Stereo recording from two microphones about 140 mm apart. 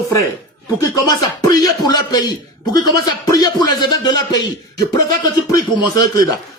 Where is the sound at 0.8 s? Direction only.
25° left (ahead or behind).